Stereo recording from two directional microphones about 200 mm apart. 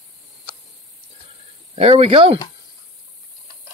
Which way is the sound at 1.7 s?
30° right (ahead or behind).